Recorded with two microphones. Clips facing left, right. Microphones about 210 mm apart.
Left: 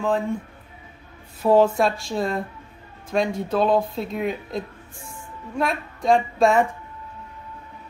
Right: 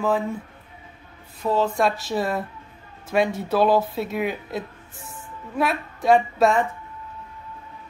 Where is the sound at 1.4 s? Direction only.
10° left (ahead or behind).